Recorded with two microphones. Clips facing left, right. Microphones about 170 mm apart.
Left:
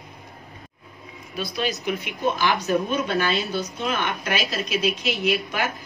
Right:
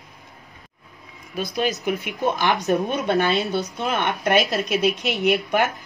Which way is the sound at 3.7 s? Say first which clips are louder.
Right 2 dB; 55° right (ahead or behind).